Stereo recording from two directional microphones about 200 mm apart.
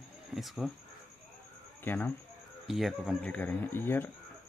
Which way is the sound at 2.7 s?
Centre (ahead or behind).